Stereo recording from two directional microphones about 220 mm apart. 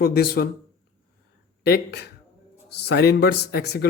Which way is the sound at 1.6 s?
50° left (ahead or behind).